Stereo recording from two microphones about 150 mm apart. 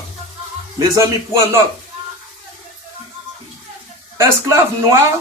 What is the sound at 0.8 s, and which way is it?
Speech, 20° right (ahead or behind).